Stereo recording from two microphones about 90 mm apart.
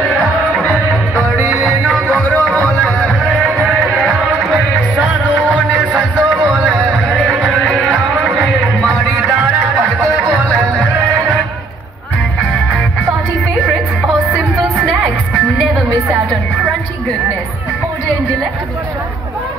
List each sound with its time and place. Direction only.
0.5 s music: 15° left (ahead or behind)
5.5 s music: 15° right (ahead or behind)
6.5 s a sound: 10° right (ahead or behind)
7.4 s music: centre (ahead or behind)